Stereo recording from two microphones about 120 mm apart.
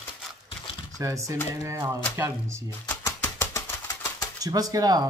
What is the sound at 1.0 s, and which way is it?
Speech, 25° right (ahead or behind).